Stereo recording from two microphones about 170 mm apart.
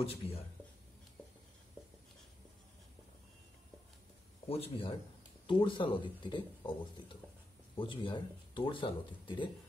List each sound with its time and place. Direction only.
0.0 s speech: 35° left (ahead or behind)
4.5 s speech: 35° left (ahead or behind)
7.7 s speech: 30° left (ahead or behind)